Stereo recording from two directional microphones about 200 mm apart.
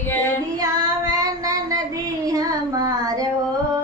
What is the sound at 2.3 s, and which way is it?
Child singing, 20° right (ahead or behind).